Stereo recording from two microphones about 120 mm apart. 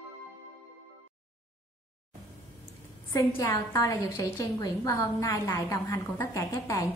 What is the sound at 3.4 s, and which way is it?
A woman's voice, 25° left (ahead or behind).